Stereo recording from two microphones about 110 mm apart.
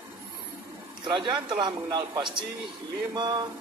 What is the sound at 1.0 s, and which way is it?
Speech, 45° right (ahead or behind).